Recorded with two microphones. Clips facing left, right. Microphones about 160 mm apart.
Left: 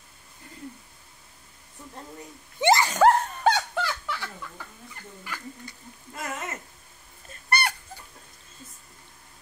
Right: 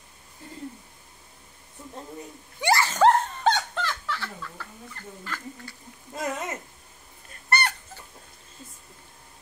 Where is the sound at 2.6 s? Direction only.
20° left (ahead or behind).